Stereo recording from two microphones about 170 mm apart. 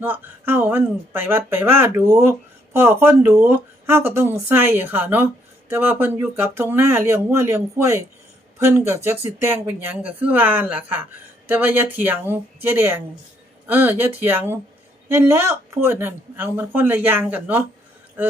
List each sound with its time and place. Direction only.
0.0 s speech: 10° right (ahead or behind)